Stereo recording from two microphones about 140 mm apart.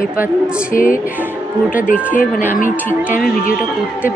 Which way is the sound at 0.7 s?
75° left (ahead or behind).